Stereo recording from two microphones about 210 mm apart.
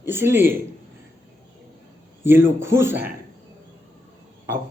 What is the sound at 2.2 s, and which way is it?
Speech, 10° right (ahead or behind).